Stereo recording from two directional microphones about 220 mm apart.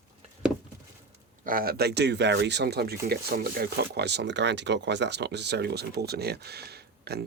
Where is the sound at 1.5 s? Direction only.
40° right (ahead or behind).